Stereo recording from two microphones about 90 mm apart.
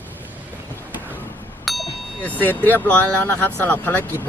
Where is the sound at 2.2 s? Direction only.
20° left (ahead or behind).